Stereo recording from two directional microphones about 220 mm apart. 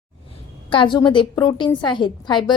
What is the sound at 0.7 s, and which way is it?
A woman's voice, 20° left (ahead or behind).